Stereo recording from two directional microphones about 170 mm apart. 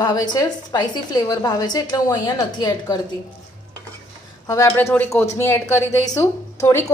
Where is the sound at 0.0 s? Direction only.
25° left (ahead or behind).